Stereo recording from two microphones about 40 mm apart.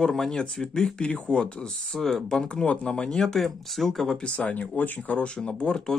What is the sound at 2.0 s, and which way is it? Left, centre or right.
Speech, centre.